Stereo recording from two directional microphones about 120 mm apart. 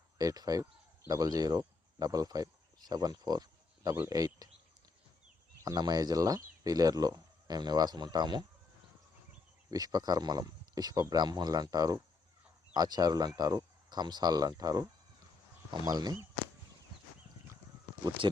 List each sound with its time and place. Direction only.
0.2 s speech: 30° right (ahead or behind)
5.6 s speech: 35° right (ahead or behind)
9.6 s speech: 30° right (ahead or behind)
15.9 s speech: 35° right (ahead or behind)